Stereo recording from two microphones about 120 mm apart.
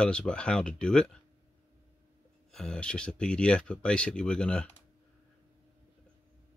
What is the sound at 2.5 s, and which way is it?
Speech, 5° left (ahead or behind).